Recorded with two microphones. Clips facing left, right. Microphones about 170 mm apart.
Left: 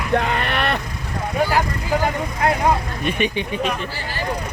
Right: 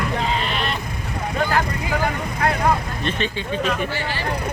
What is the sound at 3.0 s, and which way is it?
Speech, 15° left (ahead or behind).